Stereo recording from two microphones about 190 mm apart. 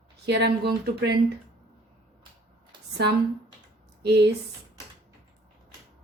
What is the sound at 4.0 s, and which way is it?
Speech, 60° right (ahead or behind).